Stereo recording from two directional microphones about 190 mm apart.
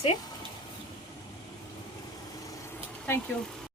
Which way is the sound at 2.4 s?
15° left (ahead or behind).